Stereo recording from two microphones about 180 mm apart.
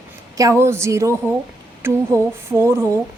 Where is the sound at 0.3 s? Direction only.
15° right (ahead or behind).